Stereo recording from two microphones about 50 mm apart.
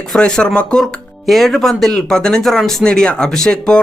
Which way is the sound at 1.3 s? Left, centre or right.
Centre.